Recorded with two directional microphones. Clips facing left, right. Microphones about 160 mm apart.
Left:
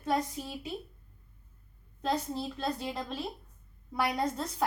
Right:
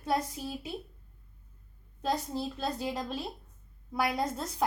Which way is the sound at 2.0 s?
Centre (ahead or behind).